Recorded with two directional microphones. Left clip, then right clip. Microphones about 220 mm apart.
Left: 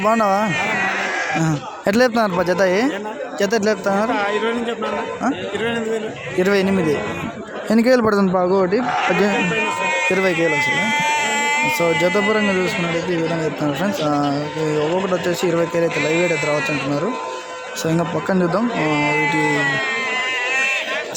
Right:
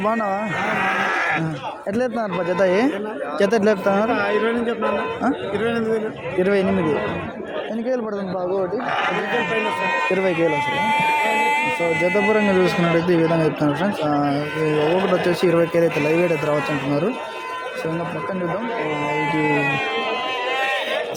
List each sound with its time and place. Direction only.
0.0 s speech: 10° left (ahead or behind)
1.9 s speech: 15° left (ahead or behind)
7.7 s a man's voice: 45° left (ahead or behind)
10.1 s speech: 5° left (ahead or behind)
10.3 s a sound: 45° left (ahead or behind)
12.3 s speech: 5° right (ahead or behind)
18.9 s a man's voice: 40° left (ahead or behind)